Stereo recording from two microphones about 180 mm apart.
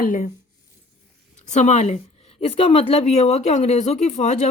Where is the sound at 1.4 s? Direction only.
40° left (ahead or behind).